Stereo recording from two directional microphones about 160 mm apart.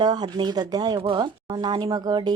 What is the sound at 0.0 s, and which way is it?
A woman's voice, 25° right (ahead or behind).